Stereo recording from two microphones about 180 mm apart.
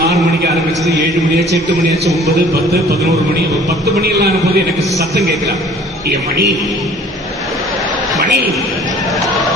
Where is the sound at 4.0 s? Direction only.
60° right (ahead or behind).